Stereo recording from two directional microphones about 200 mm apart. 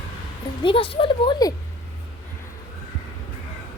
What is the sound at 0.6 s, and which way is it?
Speech, 25° left (ahead or behind).